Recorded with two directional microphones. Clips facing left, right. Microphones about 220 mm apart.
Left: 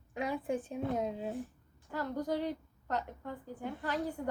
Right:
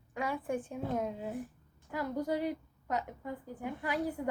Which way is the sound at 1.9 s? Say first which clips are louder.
Right 1 dB; 10° right (ahead or behind).